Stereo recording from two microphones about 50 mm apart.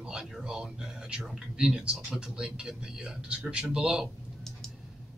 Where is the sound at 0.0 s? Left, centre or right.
Centre.